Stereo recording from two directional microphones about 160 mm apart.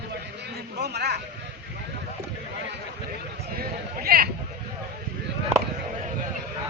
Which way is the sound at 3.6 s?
70° right (ahead or behind).